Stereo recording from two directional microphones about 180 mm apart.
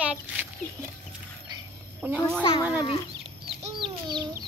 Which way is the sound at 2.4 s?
25° left (ahead or behind).